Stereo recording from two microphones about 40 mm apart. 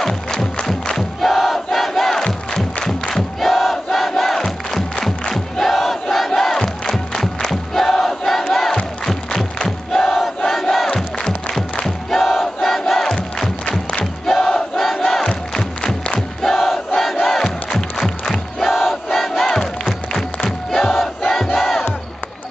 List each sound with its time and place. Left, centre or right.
0.0 s crowd: centre
3.3 s crowd: centre
13.7 s crowd: left
14.2 s crowd: centre
16.3 s crowd: centre
18.6 s crowd: centre